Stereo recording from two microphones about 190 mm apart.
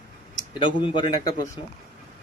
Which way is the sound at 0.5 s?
25° left (ahead or behind).